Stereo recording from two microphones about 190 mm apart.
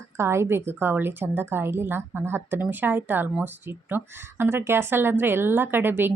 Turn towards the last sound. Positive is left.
turn(degrees=-10)  # may be behind; listen again after turning